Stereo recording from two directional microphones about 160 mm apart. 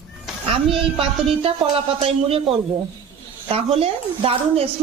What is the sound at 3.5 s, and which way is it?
A woman's voice, 40° right (ahead or behind).